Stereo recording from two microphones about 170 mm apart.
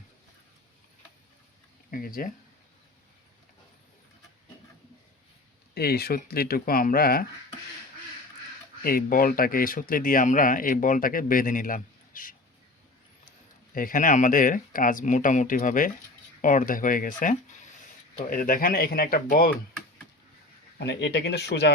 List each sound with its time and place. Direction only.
1.9 s speech: 55° left (ahead or behind)
5.7 s speech: 70° left (ahead or behind)
8.8 s speech: 60° left (ahead or behind)
13.7 s speech: 55° left (ahead or behind)
20.7 s speech: 80° left